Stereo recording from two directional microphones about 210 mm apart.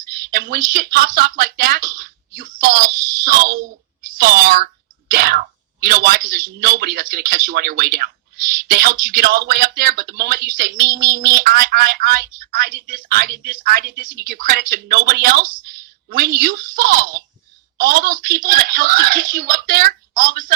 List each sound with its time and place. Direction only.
0.1 s a sound: 45° right (ahead or behind)
0.7 s speech: 45° right (ahead or behind)
11.0 s child singing: 15° right (ahead or behind)
11.3 s a woman's voice: 45° right (ahead or behind)